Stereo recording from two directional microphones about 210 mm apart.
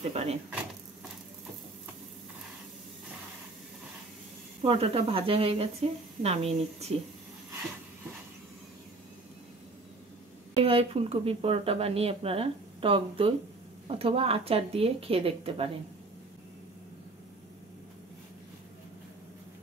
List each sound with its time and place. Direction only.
0.1 s speech: 30° right (ahead or behind)
4.6 s speech: 30° right (ahead or behind)
10.6 s speech: 30° right (ahead or behind)